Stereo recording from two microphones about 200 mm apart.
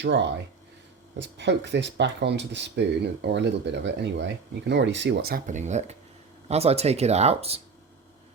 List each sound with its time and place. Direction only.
0.0 s speech: 60° right (ahead or behind); by 7.6 s 30° right (ahead or behind)